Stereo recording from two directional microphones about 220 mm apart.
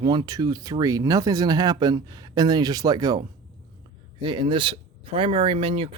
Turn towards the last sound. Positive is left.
turn(degrees=-25)  # may be behind; listen again after turning